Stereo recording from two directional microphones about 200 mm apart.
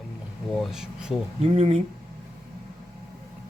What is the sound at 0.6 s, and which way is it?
Speech, centre (ahead or behind).